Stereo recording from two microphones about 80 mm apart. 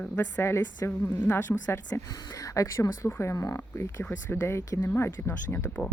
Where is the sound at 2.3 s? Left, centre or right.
Left.